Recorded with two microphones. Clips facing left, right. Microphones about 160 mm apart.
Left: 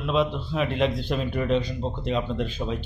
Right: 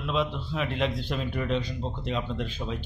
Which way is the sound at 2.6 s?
40° left (ahead or behind).